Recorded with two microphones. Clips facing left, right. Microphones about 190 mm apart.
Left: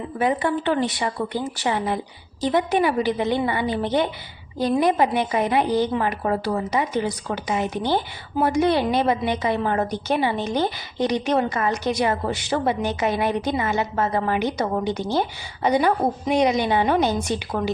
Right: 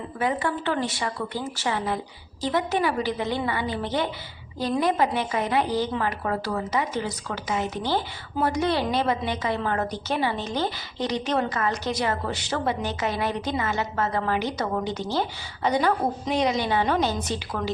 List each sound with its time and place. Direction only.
0.2 s a woman's voice: 20° left (ahead or behind)